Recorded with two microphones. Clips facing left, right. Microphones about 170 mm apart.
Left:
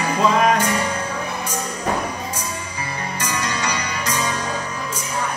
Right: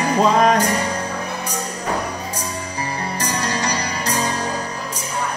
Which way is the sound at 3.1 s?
35° right (ahead or behind).